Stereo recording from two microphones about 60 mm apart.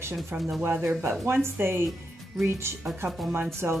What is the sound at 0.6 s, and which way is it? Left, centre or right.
Speech, right.